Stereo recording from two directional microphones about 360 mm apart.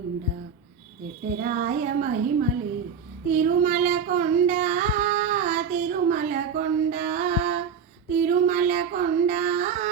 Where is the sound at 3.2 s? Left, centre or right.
Centre.